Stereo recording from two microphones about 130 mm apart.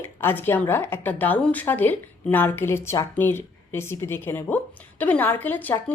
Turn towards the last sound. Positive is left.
turn(degrees=15)  # may be behind; listen again after turning